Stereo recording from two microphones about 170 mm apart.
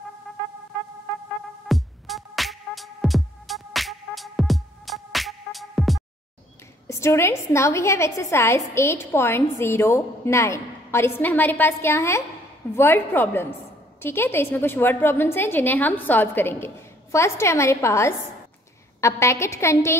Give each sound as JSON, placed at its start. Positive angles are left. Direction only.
{"t": 1.7, "sound": "music", "side_deg": 0}
{"t": 6.9, "sound": "a woman's voice", "side_deg": 15}